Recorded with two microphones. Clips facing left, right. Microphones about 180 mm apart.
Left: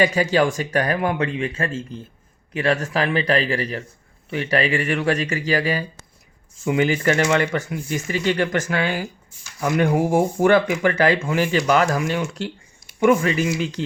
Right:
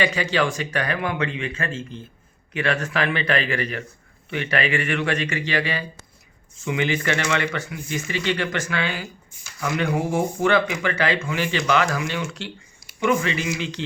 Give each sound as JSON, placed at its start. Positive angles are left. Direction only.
{"t": 0.0, "sound": "speech", "side_deg": 45}